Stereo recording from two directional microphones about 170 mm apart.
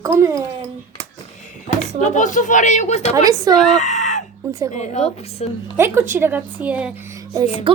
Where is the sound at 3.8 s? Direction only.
45° left (ahead or behind).